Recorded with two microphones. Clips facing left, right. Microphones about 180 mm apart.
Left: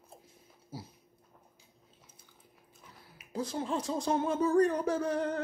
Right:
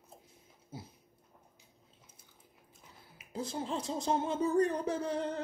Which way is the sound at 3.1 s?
25° right (ahead or behind).